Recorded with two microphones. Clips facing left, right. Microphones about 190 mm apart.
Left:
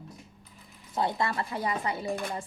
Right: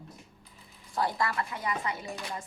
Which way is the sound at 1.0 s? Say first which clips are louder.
Left 1 dB; 25° left (ahead or behind).